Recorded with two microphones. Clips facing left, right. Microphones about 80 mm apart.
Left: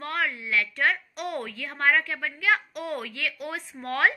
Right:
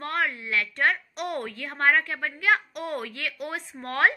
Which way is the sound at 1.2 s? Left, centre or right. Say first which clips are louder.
Right 2 dB; right.